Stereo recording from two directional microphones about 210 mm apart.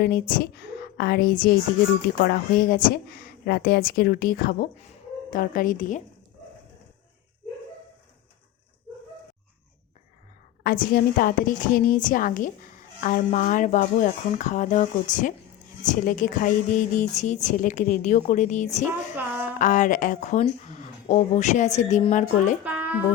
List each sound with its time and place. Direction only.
0.0 s a woman's voice: 40° left (ahead or behind)
10.6 s a woman's voice: 40° left (ahead or behind)
22.6 s a sound: 10° right (ahead or behind)